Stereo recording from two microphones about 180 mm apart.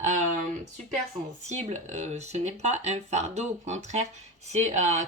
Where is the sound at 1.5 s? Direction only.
40° right (ahead or behind).